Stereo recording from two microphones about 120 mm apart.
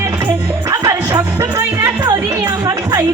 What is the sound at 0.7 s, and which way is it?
Music, 30° right (ahead or behind).